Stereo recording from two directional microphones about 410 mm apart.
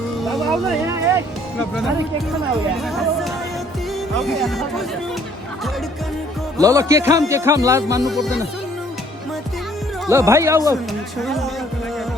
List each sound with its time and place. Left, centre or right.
0.3 s music: centre
2.8 s music: centre
4.2 s music: centre
6.6 s speech: centre
10.1 s speech: centre
11.2 s music: centre